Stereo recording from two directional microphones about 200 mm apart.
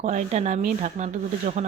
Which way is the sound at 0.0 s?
35° right (ahead or behind).